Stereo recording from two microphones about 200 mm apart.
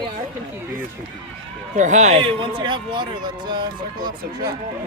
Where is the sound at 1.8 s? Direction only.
35° right (ahead or behind); by 4.5 s 20° right (ahead or behind).